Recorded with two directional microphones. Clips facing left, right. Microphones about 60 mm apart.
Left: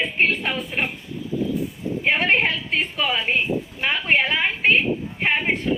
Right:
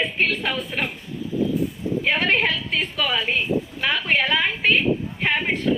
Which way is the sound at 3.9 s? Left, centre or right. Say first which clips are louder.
Left 1 dB; left.